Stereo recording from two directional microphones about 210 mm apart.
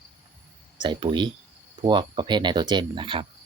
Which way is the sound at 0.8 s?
20° right (ahead or behind).